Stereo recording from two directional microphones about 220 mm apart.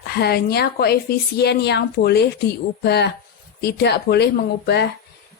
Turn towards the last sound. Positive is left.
turn(degrees=50)  # may be behind; listen again after turning